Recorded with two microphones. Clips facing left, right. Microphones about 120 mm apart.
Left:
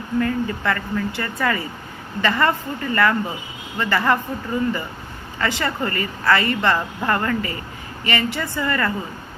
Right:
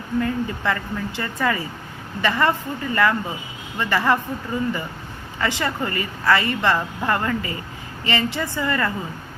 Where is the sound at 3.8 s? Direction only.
15° right (ahead or behind).